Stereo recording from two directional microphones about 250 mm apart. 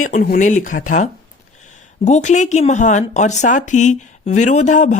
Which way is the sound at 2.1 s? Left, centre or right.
Left.